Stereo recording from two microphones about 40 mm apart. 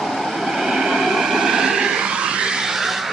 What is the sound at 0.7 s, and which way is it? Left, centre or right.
Vehicle, centre.